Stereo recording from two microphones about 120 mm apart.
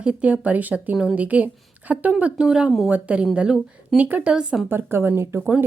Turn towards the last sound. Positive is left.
turn(degrees=-20)  # may be behind; listen again after turning